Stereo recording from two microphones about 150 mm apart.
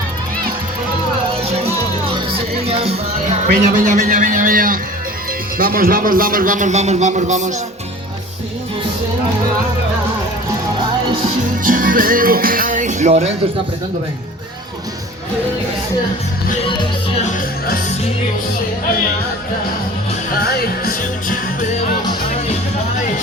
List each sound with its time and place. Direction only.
1.4 s music: 40° right (ahead or behind)
3.5 s a sound: 60° right (ahead or behind)
5.5 s a man's voice: 75° right (ahead or behind); by 7.5 s 55° right (ahead or behind)
11.6 s music: 65° right (ahead or behind); by 13.3 s 50° right (ahead or behind)
17.2 s music: 60° left (ahead or behind)
20.3 s music: 90° left; by 21.7 s 70° left (ahead or behind)